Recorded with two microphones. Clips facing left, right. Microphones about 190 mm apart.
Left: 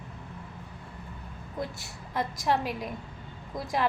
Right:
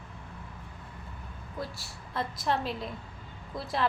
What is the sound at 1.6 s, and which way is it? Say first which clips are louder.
A woman's voice: left 3 dB; 15° left (ahead or behind).